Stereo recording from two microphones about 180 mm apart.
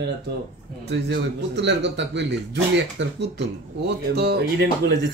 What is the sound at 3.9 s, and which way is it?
Speech, 60° right (ahead or behind).